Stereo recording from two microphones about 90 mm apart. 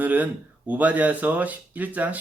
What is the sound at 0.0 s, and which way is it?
Speech, 20° right (ahead or behind).